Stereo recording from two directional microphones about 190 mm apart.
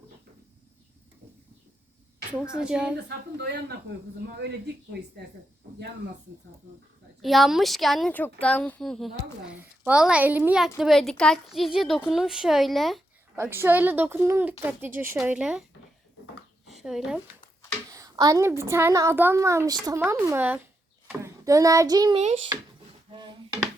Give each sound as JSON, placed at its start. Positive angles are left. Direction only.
{"t": 2.5, "sound": "a woman's voice", "side_deg": -5}
{"t": 3.4, "sound": "speech", "side_deg": -60}
{"t": 7.2, "sound": "a woman's voice", "side_deg": 0}
{"t": 13.3, "sound": "a woman's voice", "side_deg": -10}
{"t": 16.6, "sound": "speech", "side_deg": 0}
{"t": 17.9, "sound": "a woman's voice", "side_deg": -20}
{"t": 22.2, "sound": "speech", "side_deg": -35}
{"t": 23.1, "sound": "a sound", "side_deg": -25}